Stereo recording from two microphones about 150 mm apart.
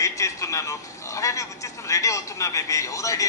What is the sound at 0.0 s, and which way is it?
A man's voice, 20° left (ahead or behind).